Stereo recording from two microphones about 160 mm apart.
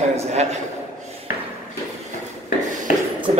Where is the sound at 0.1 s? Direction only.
45° right (ahead or behind).